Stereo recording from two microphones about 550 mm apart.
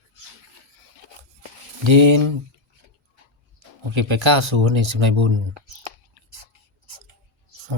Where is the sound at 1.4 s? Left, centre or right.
Right.